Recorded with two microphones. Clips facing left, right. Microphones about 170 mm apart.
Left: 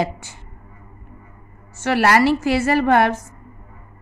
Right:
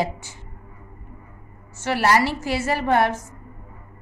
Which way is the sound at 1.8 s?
70° left (ahead or behind).